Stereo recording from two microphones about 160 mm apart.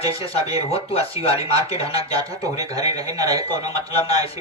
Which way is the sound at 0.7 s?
40° left (ahead or behind).